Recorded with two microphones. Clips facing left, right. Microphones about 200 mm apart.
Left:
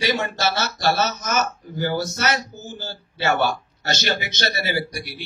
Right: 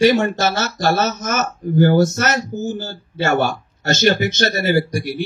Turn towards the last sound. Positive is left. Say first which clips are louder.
# right 9 dB
turn(degrees=-45)  # may be behind; listen again after turning